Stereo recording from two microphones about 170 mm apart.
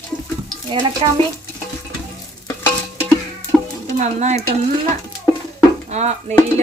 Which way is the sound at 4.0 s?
45° right (ahead or behind).